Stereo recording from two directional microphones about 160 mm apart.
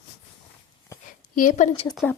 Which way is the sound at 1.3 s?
55° left (ahead or behind).